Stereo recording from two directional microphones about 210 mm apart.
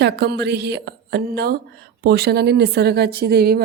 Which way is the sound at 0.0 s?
55° right (ahead or behind).